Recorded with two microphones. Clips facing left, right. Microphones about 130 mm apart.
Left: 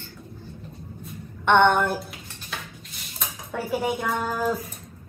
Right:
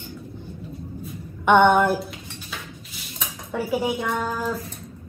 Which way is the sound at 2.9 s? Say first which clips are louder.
Even; centre (ahead or behind).